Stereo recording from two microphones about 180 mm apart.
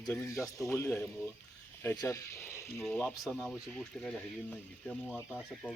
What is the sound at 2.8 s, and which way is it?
Speech, 5° left (ahead or behind).